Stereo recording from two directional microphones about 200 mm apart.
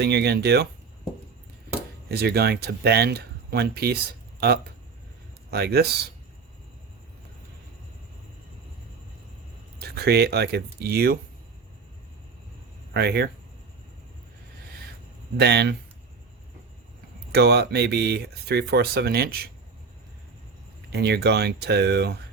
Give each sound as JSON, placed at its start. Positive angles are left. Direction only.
{"t": 0.0, "sound": "speech", "side_deg": -55}
{"t": 2.0, "sound": "speech", "side_deg": -50}
{"t": 9.9, "sound": "speech", "side_deg": -55}
{"t": 12.9, "sound": "speech", "side_deg": -55}
{"t": 15.4, "sound": "speech", "side_deg": -55}
{"t": 17.3, "sound": "speech", "side_deg": -55}
{"t": 20.9, "sound": "speech", "side_deg": -55}